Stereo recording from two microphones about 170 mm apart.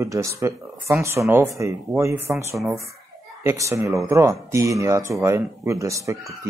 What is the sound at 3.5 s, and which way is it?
Speech, 15° right (ahead or behind).